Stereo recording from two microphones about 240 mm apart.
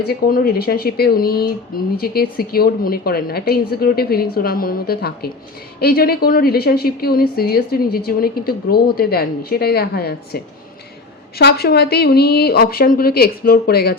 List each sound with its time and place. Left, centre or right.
0.1 s a woman's voice: left